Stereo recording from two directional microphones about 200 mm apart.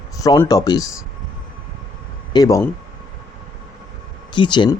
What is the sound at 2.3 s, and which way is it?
Speech, 15° left (ahead or behind).